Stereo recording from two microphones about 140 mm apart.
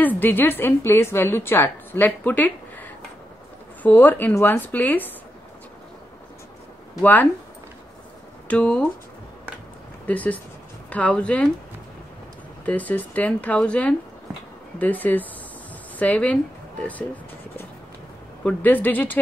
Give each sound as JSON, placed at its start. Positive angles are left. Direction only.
{"t": 0.0, "sound": "a woman's voice", "side_deg": 15}
{"t": 7.0, "sound": "a woman's voice", "side_deg": 10}
{"t": 8.5, "sound": "a woman's voice", "side_deg": 10}
{"t": 10.0, "sound": "a woman's voice", "side_deg": 10}
{"t": 12.6, "sound": "a woman's voice", "side_deg": 10}